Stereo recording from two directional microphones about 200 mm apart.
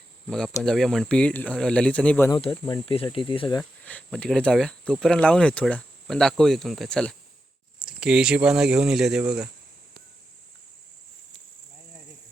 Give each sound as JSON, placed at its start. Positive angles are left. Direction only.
{"t": 0.3, "sound": "speech", "side_deg": 5}
{"t": 2.3, "sound": "speech", "side_deg": 25}
{"t": 3.6, "sound": "speech", "side_deg": 5}